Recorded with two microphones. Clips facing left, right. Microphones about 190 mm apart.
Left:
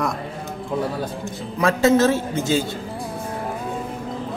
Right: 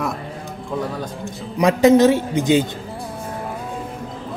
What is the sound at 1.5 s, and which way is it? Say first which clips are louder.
A man's voice: right 4 dB; 15° right (ahead or behind).